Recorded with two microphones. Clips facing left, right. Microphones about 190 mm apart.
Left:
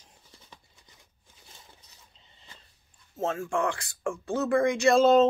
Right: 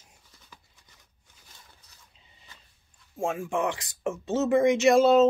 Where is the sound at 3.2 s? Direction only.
15° right (ahead or behind).